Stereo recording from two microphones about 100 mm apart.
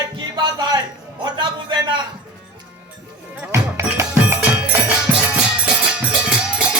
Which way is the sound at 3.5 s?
30° right (ahead or behind).